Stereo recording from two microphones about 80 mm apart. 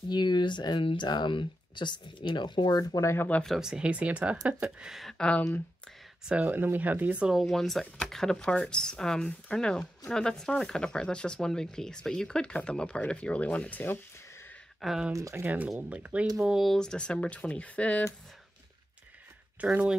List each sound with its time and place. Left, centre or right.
0.1 s speech: left
2.8 s speech: left
3.2 s speech: centre
3.4 s speech: centre
5.0 s speech: centre
6.2 s speech: centre
7.3 s speech: centre; by 14.0 s left
14.8 s speech: centre
15.1 s speech: right
15.4 s speech: centre
16.3 s speech: centre
16.7 s speech: centre
19.6 s speech: centre